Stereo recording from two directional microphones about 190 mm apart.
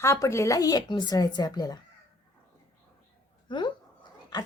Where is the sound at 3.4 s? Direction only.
25° left (ahead or behind).